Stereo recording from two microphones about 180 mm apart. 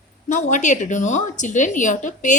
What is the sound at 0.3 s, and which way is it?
A woman's voice, 45° left (ahead or behind).